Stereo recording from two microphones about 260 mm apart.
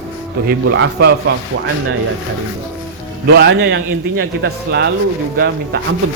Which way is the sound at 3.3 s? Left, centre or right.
Right.